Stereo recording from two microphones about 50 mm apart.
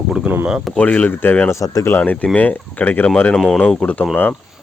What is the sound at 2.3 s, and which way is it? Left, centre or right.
Speech, left.